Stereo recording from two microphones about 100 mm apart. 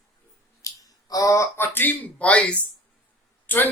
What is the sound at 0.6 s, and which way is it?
Speech, 35° left (ahead or behind).